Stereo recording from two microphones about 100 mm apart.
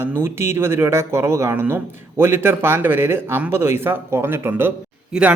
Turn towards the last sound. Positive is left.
turn(degrees=-5)  # may be behind; listen again after turning